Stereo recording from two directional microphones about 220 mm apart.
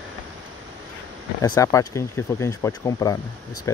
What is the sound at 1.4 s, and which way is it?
Speech, 15° left (ahead or behind).